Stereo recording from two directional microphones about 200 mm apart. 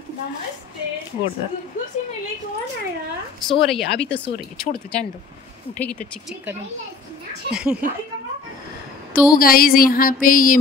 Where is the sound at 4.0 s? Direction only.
5° left (ahead or behind).